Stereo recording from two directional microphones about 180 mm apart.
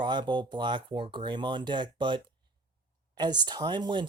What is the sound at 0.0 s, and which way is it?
Speech, 25° right (ahead or behind).